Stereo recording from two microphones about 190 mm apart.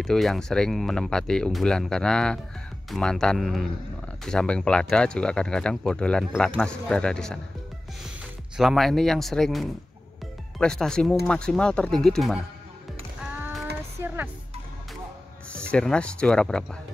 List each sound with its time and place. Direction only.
0.0 s speech: centre (ahead or behind)
8.5 s speech: centre (ahead or behind)
13.3 s music: 5° right (ahead or behind)
15.5 s speech: 5° left (ahead or behind)